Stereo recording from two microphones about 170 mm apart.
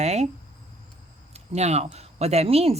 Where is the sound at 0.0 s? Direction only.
40° right (ahead or behind).